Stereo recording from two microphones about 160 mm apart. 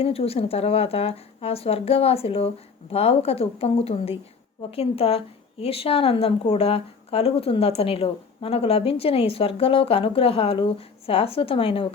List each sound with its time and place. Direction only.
0.0 s a woman's voice: 40° left (ahead or behind)